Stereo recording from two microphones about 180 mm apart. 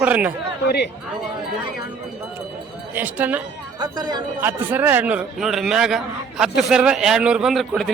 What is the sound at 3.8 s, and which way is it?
Speech, 20° right (ahead or behind).